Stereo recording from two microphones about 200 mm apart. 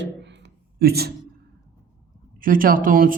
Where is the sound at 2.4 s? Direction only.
45° right (ahead or behind).